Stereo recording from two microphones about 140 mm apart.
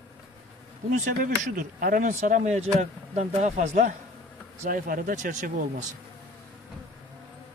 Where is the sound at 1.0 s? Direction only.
75° right (ahead or behind).